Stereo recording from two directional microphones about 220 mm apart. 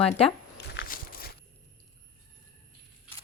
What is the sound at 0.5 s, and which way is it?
Walk, 45° left (ahead or behind).